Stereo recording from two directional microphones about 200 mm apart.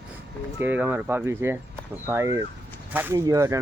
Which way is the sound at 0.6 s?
10° right (ahead or behind).